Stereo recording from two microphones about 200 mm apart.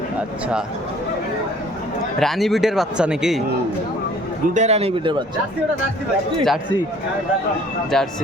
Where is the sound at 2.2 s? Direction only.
Centre (ahead or behind).